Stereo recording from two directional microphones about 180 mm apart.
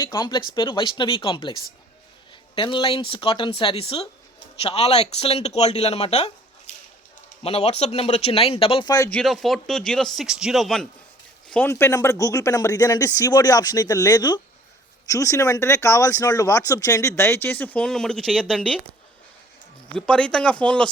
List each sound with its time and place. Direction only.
0.0 s speech: 25° left (ahead or behind)
2.6 s speech: 25° left (ahead or behind)
7.4 s speech: 35° left (ahead or behind)
9.0 s speech: 5° left (ahead or behind)
19.9 s speech: 5° left (ahead or behind)